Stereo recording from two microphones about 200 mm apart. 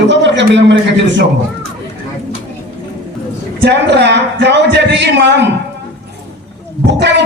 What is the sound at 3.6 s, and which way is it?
Music, 60° right (ahead or behind).